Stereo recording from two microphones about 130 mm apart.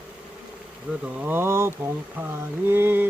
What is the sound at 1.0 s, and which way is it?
Speech, 15° right (ahead or behind).